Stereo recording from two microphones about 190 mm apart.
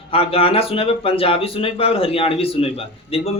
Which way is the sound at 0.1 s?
30° left (ahead or behind).